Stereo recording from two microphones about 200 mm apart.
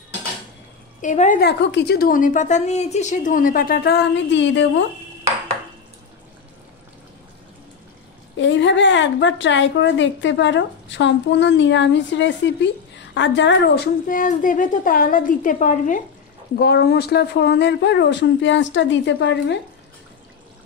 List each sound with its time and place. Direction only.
1.0 s a woman's voice: 40° left (ahead or behind)
1.4 s a woman's voice: 60° left (ahead or behind)
8.4 s a woman's voice: 65° left (ahead or behind)
14.0 s a woman's voice: 40° left (ahead or behind)
16.5 s a woman's voice: 50° left (ahead or behind)